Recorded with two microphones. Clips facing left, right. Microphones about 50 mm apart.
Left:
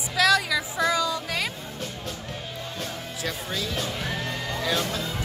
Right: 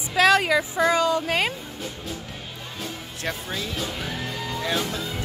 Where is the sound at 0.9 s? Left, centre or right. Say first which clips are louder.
Right 5 dB; right.